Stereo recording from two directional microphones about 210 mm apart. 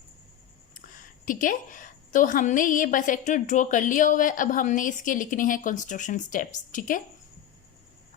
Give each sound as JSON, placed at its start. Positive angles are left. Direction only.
{"t": 0.7, "sound": "a woman's voice", "side_deg": 40}